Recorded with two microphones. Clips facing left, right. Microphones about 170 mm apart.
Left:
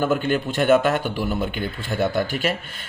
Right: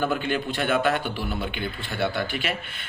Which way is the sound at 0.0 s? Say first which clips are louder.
Left 4 dB; 45° left (ahead or behind).